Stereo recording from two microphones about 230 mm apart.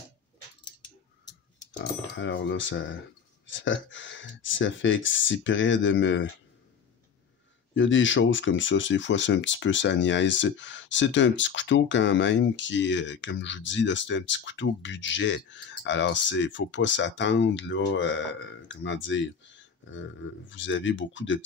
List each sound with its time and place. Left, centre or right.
1.8 s speech: left
7.7 s speech: left